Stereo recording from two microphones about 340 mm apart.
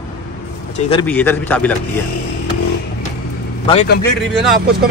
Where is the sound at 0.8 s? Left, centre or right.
Centre.